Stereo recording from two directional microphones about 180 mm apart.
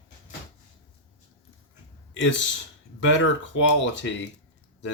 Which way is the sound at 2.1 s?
90° left.